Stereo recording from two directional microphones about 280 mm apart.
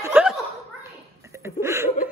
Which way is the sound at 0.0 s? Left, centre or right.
Centre.